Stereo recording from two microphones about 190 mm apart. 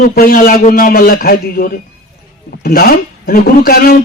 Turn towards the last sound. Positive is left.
turn(degrees=50)  # may be behind; listen again after turning